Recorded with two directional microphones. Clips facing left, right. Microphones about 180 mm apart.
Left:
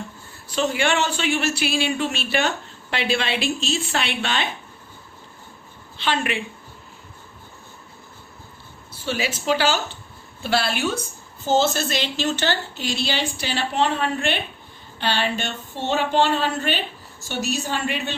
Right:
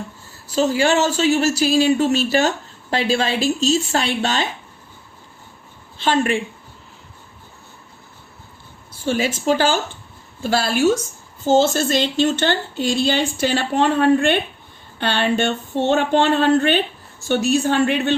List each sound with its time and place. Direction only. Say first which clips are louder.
0.5 s speech: right 5 dB; 35° right (ahead or behind)
6.0 s speech: right 6 dB; 45° right (ahead or behind)
9.0 s speech: right 5 dB; 50° right (ahead or behind)